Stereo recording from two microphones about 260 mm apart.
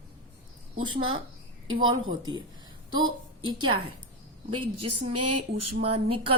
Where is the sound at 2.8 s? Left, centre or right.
Centre.